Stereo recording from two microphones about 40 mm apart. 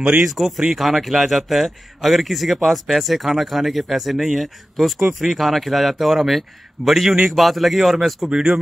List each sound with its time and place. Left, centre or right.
0.3 s a man's voice: centre
8.3 s speech: centre